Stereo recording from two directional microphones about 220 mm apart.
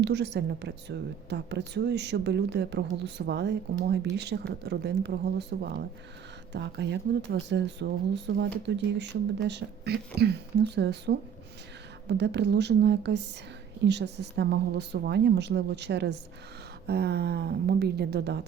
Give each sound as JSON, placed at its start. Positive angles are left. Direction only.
{"t": 0.0, "sound": "a woman's voice", "side_deg": -50}